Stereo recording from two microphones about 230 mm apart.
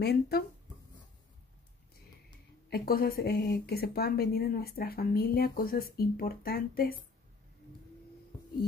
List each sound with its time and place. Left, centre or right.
0.0 s speech: left
2.7 s a woman's voice: left